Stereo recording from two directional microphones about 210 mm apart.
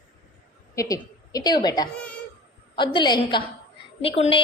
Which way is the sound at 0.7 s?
15° left (ahead or behind).